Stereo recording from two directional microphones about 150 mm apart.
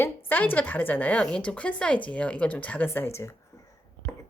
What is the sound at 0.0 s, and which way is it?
A woman's voice, 15° left (ahead or behind).